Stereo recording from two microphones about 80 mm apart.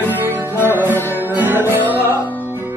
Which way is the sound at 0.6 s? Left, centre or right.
Left.